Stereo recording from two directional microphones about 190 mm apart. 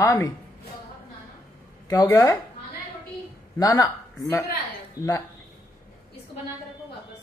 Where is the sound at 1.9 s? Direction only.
15° left (ahead or behind).